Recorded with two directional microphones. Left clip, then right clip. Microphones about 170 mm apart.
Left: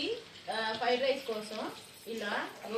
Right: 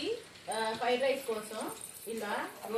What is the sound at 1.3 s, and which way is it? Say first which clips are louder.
Speech: right 1 dB; 15° right (ahead or behind).